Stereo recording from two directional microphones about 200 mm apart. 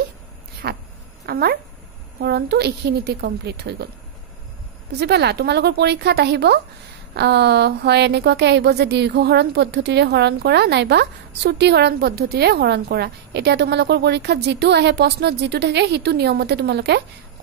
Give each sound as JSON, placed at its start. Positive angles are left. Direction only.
{"t": 0.6, "sound": "a sound", "side_deg": -50}
{"t": 1.2, "sound": "a woman's voice", "side_deg": -50}
{"t": 4.9, "sound": "a woman's voice", "side_deg": -55}